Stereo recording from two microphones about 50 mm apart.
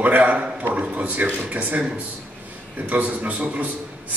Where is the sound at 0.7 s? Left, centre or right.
Right.